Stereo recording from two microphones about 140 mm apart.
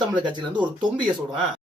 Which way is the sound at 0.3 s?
35° right (ahead or behind).